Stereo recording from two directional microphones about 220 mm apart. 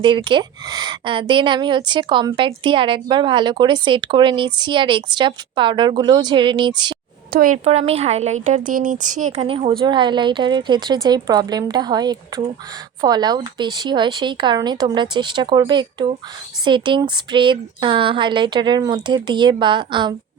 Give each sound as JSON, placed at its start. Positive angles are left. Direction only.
{"t": 0.0, "sound": "a woman's voice", "side_deg": -20}
{"t": 7.3, "sound": "a woman's voice", "side_deg": -35}